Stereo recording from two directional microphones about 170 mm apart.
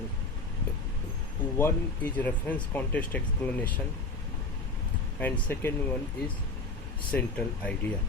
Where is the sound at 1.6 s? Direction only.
10° left (ahead or behind).